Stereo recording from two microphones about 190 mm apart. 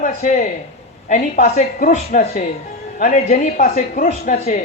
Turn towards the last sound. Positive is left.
turn(degrees=40)  # may be behind; listen again after turning